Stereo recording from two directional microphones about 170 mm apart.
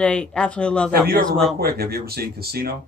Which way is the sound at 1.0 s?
65° right (ahead or behind).